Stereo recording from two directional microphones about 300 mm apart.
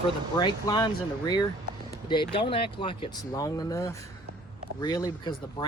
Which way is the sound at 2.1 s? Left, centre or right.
Centre.